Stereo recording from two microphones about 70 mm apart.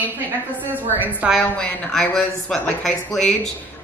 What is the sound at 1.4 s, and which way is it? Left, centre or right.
A woman's voice, centre.